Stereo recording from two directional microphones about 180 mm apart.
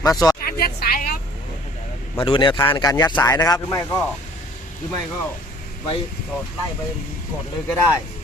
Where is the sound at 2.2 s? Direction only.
25° left (ahead or behind).